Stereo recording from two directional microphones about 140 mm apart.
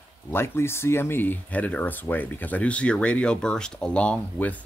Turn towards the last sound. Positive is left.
turn(degrees=10)  # may be behind; listen again after turning